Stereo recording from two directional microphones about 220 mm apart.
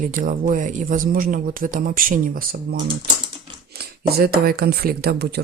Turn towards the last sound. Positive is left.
turn(degrees=-45)  # may be behind; listen again after turning